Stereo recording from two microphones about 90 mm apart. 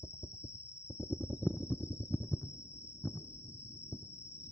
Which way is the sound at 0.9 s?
15° right (ahead or behind).